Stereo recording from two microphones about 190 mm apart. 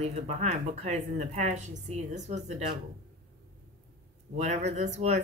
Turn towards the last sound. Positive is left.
turn(degrees=-35)  # may be behind; listen again after turning